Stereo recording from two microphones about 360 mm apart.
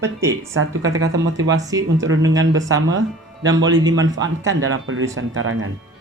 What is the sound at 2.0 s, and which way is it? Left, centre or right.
Speech, right.